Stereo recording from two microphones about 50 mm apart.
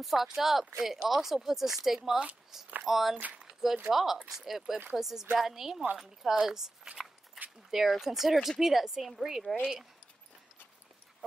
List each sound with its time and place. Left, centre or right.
0.0 s speech: centre
3.3 s a sound: centre
3.9 s speech: centre